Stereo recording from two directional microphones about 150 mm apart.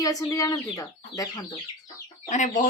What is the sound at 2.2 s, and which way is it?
Speech, 55° left (ahead or behind).